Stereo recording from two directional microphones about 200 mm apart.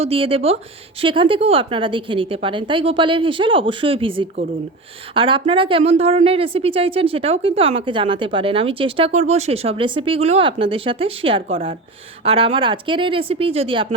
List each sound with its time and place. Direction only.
0.0 s a woman's voice: 30° right (ahead or behind)